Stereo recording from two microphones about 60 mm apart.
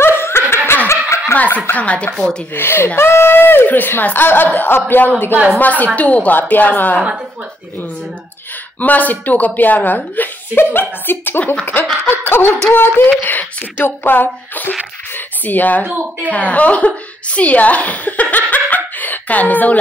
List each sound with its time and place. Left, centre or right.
0.0 s snicker: left
1.3 s speech: left
2.1 s speech: centre
2.5 s speech: left
8.7 s speech: left
15.8 s speech: right
16.3 s a woman's voice: left